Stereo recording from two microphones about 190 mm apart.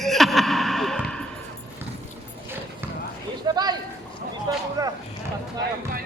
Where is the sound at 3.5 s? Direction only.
20° right (ahead or behind).